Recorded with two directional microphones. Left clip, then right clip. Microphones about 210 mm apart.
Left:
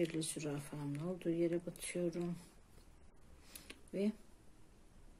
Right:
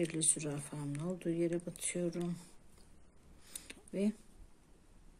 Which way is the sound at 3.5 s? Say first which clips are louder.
Right 2 dB; 15° right (ahead or behind).